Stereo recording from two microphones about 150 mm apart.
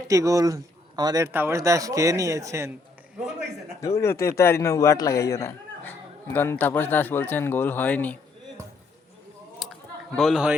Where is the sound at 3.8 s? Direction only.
20° left (ahead or behind).